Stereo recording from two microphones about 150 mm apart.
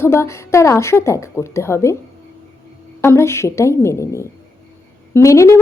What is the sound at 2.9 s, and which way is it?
Speech, 20° left (ahead or behind).